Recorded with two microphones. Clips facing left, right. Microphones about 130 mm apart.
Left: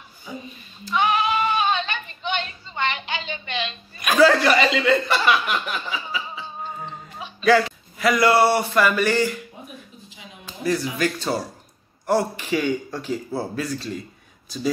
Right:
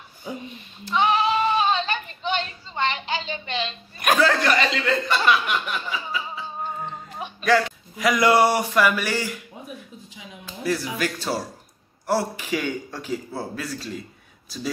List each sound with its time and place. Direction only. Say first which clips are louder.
0.8 s sheep: right 1 dB; 30° right (ahead or behind)
4.2 s a man's voice: left 7 dB; 5° left (ahead or behind)
7.4 s a man's voice: left 3 dB; 5° left (ahead or behind)
8.0 s speech: left 1 dB; 15° right (ahead or behind)
10.6 s a man's voice: left 3 dB; 5° right (ahead or behind)